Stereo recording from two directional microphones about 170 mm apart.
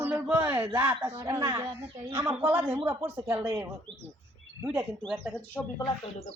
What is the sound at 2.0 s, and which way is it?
A man's voice, 10° right (ahead or behind).